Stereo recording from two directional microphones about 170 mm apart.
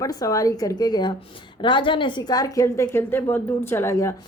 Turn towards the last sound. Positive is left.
turn(degrees=15)  # may be behind; listen again after turning